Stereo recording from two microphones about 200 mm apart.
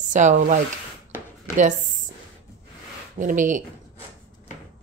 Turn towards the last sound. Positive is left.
turn(degrees=-40)  # may be behind; listen again after turning